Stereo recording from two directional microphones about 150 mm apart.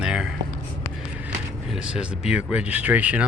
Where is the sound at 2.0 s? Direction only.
5° right (ahead or behind).